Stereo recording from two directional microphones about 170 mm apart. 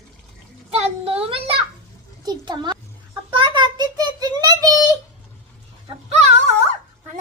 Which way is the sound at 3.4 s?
25° right (ahead or behind).